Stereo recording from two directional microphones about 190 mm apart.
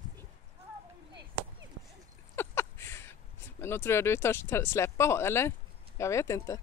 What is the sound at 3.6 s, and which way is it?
Speech, 15° left (ahead or behind).